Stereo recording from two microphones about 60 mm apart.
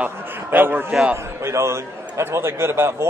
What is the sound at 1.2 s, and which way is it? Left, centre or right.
A man's voice, right.